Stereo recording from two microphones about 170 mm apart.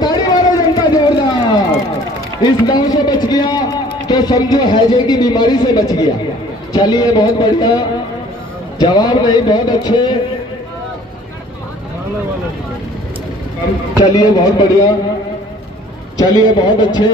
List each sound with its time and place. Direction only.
0.0 s run: 25° left (ahead or behind)
2.4 s speech: 25° left (ahead or behind)
14.1 s speech: 25° left (ahead or behind)
16.3 s speech: 25° left (ahead or behind)